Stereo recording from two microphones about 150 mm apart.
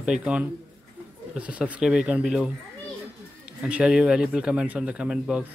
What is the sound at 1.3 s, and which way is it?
Speech, 10° right (ahead or behind).